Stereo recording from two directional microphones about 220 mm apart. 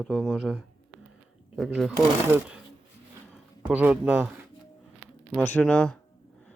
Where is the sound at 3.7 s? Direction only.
5° right (ahead or behind).